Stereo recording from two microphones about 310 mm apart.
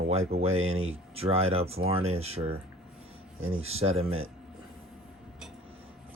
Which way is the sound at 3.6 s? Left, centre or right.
Centre.